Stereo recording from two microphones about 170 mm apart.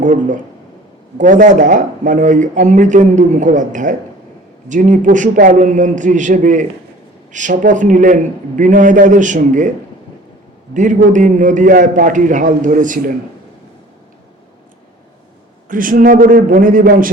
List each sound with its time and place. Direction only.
0.0 s speech: 50° right (ahead or behind)
10.8 s speech: 45° right (ahead or behind)
15.7 s speech: 55° right (ahead or behind)